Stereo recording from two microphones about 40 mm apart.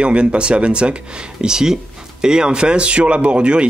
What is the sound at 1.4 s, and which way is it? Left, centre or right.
Speech, centre.